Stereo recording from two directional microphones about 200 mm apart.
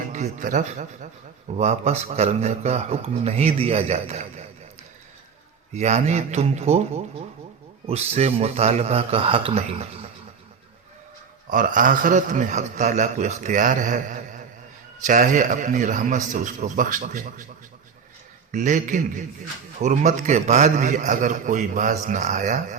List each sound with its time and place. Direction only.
0.1 s a man's voice: 40° right (ahead or behind)
5.7 s a man's voice: 35° right (ahead or behind)
11.4 s a man's voice: 40° right (ahead or behind)
18.5 s a man's voice: 40° right (ahead or behind)